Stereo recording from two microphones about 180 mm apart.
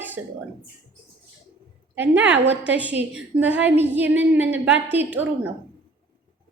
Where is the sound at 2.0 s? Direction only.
10° right (ahead or behind).